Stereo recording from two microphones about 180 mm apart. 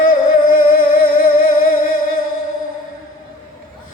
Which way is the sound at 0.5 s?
55° left (ahead or behind).